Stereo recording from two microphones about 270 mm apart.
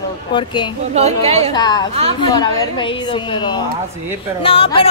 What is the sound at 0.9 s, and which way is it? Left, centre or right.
Speech, right.